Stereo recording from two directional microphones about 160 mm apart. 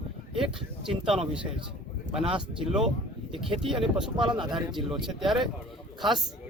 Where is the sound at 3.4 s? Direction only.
35° right (ahead or behind).